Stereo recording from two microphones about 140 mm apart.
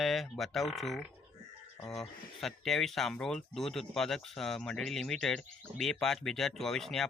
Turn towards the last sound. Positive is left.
turn(degrees=0)  # may be behind; listen again after turning